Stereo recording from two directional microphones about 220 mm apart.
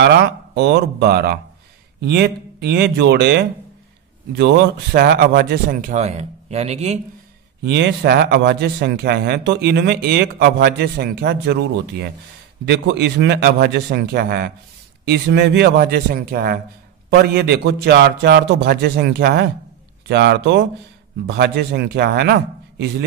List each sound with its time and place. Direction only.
0.0 s speech: 50° right (ahead or behind)
4.9 s speech: 45° right (ahead or behind); by 7.0 s 30° right (ahead or behind)
7.6 s speech: 50° right (ahead or behind)